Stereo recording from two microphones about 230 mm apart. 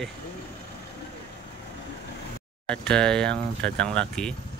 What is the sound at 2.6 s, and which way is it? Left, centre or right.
Speech, centre.